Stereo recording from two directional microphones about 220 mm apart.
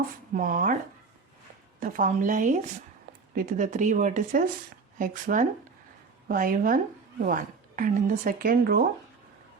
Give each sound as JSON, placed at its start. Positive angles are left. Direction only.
{"t": 0.3, "sound": "speech", "side_deg": -40}
{"t": 1.8, "sound": "speech", "side_deg": -35}